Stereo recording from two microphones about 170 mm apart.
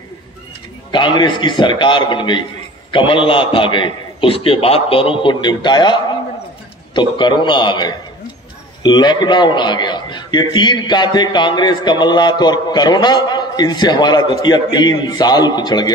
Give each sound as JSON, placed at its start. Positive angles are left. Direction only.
{"t": 0.9, "sound": "a man's voice", "side_deg": 25}